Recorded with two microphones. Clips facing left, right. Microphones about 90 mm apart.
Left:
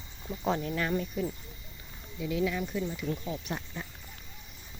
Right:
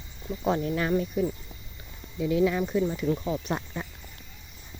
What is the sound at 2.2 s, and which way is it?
Speech, 40° right (ahead or behind).